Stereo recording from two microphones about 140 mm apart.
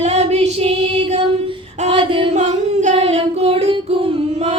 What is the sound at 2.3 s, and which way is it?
Singing, 55° right (ahead or behind).